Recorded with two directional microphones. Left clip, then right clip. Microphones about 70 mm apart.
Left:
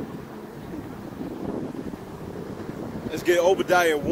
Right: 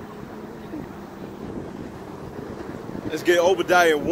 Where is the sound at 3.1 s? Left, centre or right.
Right.